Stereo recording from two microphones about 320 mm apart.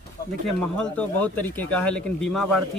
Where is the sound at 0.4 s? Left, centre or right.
Centre.